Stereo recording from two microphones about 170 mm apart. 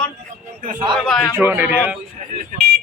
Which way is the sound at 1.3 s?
10° right (ahead or behind).